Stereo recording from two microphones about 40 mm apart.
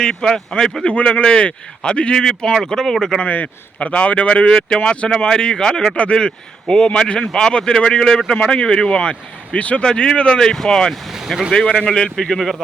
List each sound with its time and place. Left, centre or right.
0.0 s speech: centre
0.9 s speech: left; by 3.2 s centre
3.2 s speech: left
3.8 s speech: left
4.7 s speech: left
6.0 s speech: left
9.8 s speech: left
12.1 s speech: centre